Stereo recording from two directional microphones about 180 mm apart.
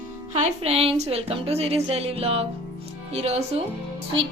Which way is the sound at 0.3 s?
40° right (ahead or behind).